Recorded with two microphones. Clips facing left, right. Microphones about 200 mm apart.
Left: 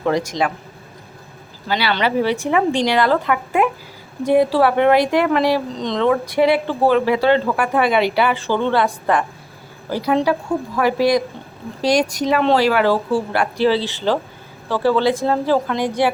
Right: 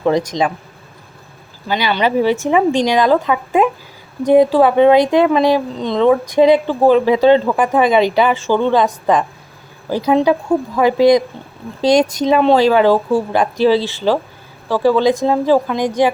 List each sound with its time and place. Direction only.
0.4 s speech: 20° right (ahead or behind)
1.6 s speech: 15° right (ahead or behind)